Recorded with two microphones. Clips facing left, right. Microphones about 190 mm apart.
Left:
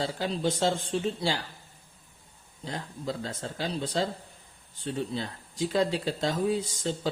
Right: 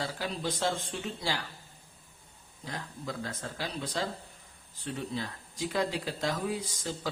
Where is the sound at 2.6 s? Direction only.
25° left (ahead or behind).